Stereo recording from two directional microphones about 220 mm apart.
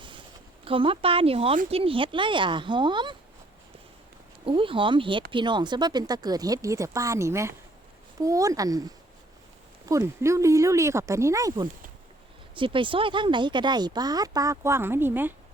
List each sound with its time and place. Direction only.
0.6 s speech: 25° right (ahead or behind)
4.4 s speech: 25° right (ahead or behind)
9.9 s speech: 15° right (ahead or behind)